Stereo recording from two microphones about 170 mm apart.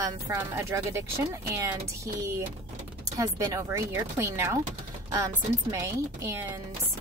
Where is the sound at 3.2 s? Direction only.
20° right (ahead or behind).